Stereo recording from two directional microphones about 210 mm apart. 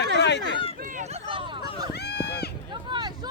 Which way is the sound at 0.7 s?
40° right (ahead or behind).